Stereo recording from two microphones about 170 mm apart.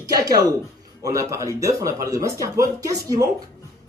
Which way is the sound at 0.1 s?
20° right (ahead or behind).